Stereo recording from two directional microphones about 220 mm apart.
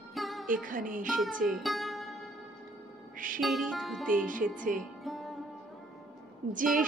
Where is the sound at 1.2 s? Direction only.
Centre (ahead or behind).